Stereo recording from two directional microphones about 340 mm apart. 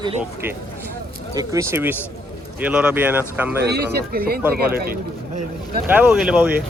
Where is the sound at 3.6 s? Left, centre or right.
Right.